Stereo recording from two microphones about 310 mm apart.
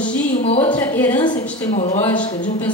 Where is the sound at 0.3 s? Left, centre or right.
Left.